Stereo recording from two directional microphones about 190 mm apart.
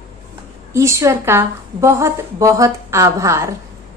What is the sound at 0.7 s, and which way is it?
A woman's voice, 15° right (ahead or behind).